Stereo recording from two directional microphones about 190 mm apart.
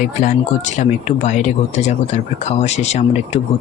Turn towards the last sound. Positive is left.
turn(degrees=35)  # may be behind; listen again after turning